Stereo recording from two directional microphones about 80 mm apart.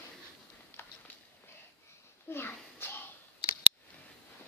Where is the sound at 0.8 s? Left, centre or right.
Left.